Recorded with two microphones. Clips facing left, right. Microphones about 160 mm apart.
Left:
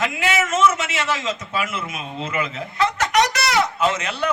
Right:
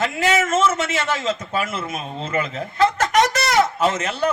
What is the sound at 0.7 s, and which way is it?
Speech, 50° right (ahead or behind).